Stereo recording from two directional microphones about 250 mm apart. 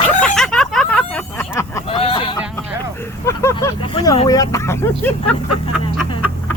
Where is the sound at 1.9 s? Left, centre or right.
Left.